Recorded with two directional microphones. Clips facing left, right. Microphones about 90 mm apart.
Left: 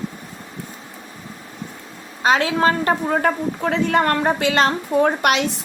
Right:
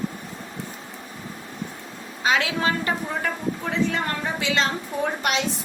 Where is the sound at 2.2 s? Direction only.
40° left (ahead or behind).